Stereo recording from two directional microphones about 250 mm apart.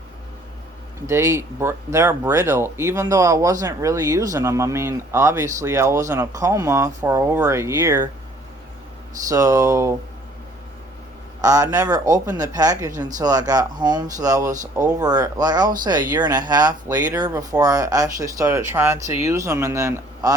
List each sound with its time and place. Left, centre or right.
1.0 s speech: centre
9.3 s speech: centre
11.3 s speech: centre